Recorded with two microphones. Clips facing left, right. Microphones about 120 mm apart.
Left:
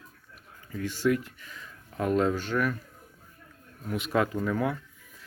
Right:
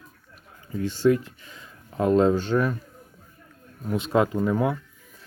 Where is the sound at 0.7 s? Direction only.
30° right (ahead or behind).